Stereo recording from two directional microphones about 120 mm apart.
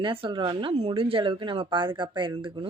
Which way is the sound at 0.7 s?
55° right (ahead or behind).